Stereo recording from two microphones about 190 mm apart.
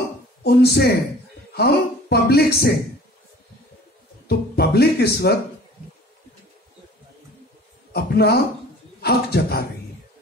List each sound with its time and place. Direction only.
0.4 s speech: 55° left (ahead or behind)
4.3 s speech: 55° left (ahead or behind)
7.9 s speech: 55° left (ahead or behind)